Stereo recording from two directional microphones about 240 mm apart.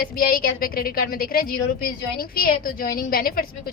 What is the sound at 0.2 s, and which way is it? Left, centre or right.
A woman's voice, left.